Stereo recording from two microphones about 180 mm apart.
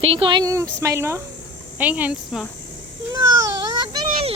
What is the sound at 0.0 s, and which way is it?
Speech, 30° right (ahead or behind).